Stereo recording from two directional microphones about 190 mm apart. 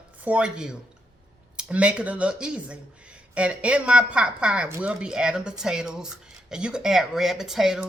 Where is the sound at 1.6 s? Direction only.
5° right (ahead or behind).